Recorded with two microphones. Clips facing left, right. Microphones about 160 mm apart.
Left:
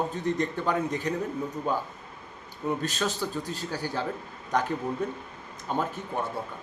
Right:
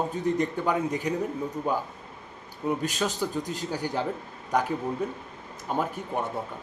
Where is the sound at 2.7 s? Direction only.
15° right (ahead or behind).